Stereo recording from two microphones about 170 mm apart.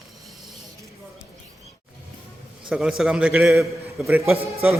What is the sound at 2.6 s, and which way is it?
A man's voice, 5° right (ahead or behind).